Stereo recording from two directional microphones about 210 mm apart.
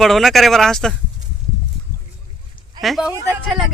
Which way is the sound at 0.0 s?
Centre (ahead or behind).